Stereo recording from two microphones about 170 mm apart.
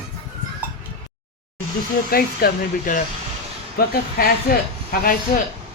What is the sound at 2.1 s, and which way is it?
Speech, 55° left (ahead or behind).